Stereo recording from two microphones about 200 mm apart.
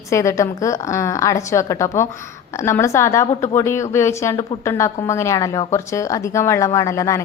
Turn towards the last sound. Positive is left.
turn(degrees=15)  # may be behind; listen again after turning